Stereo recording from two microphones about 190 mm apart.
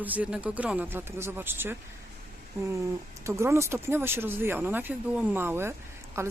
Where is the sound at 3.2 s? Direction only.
15° right (ahead or behind).